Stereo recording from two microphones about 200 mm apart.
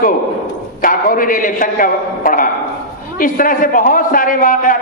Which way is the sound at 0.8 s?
45° left (ahead or behind).